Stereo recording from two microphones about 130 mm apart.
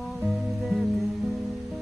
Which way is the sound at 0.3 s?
Centre (ahead or behind).